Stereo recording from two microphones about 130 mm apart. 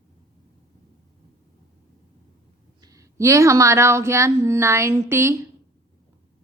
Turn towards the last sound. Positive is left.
turn(degrees=-20)  # may be behind; listen again after turning